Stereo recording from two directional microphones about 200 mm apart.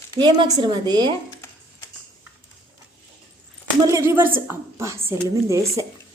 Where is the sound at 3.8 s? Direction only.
15° right (ahead or behind).